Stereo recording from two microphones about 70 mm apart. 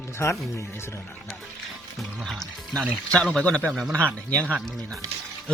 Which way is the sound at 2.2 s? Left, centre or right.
Centre.